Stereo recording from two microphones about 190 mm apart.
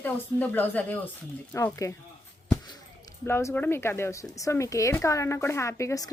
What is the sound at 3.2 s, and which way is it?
A woman's voice, 15° left (ahead or behind).